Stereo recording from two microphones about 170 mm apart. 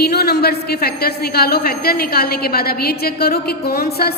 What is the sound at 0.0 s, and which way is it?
A woman's voice, 70° left (ahead or behind).